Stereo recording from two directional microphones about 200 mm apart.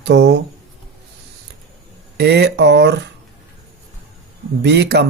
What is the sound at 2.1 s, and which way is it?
Speech, 55° right (ahead or behind).